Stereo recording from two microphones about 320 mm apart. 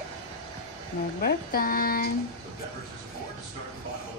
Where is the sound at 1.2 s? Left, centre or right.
Left.